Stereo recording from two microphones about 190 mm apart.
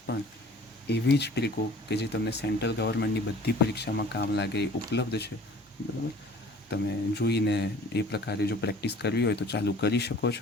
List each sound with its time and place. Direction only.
0.9 s speech: 60° left (ahead or behind)
6.7 s speech: 60° left (ahead or behind)